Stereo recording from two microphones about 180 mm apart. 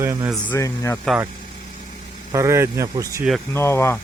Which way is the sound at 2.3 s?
15° right (ahead or behind).